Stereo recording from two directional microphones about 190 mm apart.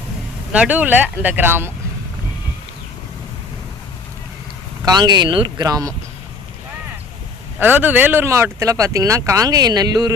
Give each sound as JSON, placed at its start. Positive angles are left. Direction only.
{"t": 0.5, "sound": "speech", "side_deg": -5}
{"t": 4.9, "sound": "speech", "side_deg": -20}
{"t": 7.6, "sound": "speech", "side_deg": -10}